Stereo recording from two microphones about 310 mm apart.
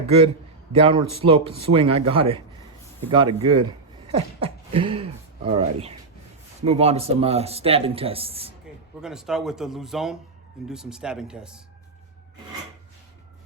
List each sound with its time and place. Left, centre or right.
0.7 s speech: centre
9.0 s a man's voice: centre